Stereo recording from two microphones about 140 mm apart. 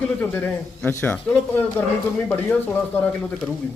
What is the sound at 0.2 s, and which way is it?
A man's voice, 10° left (ahead or behind).